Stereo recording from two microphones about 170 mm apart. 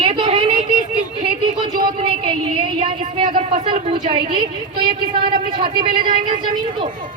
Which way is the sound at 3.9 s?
25° right (ahead or behind).